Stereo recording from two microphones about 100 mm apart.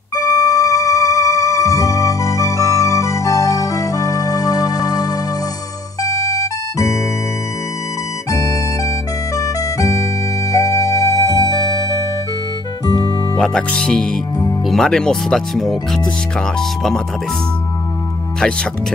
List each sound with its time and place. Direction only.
0.1 s organ: 35° left (ahead or behind)
6.0 s music: 35° left (ahead or behind)
8.3 s music: 35° left (ahead or behind)
11.5 s music: 45° left (ahead or behind)
13.4 s speech: 5° left (ahead or behind)